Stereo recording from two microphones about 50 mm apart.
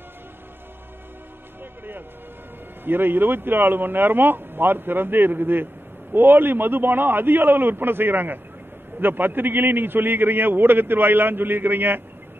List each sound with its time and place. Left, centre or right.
2.8 s a man's voice: right